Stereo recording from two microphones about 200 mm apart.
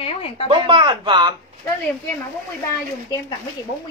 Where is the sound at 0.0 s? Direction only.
30° left (ahead or behind).